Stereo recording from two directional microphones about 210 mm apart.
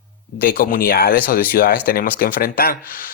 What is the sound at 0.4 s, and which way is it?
Speech, 40° left (ahead or behind).